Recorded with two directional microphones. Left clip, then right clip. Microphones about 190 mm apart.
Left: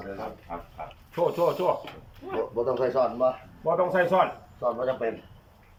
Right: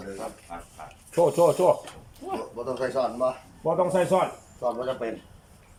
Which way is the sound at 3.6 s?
20° right (ahead or behind).